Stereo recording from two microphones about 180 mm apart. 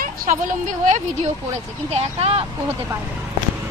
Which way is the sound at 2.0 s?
35° right (ahead or behind).